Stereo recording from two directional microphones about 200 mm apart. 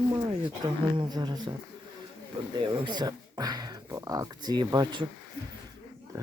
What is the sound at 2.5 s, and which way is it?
Speech, 25° right (ahead or behind).